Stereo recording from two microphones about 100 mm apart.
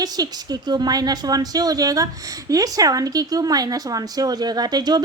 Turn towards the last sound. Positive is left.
turn(degrees=-45)  # may be behind; listen again after turning